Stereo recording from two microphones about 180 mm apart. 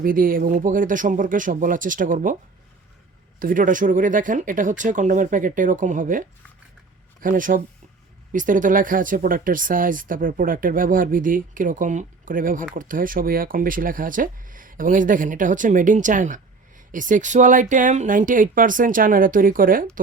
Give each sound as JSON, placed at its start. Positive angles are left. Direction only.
{"t": 0.0, "sound": "speech", "side_deg": -50}
{"t": 3.4, "sound": "speech", "side_deg": -50}